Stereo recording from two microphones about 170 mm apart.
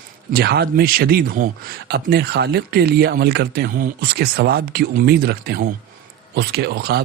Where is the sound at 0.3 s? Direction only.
70° right (ahead or behind).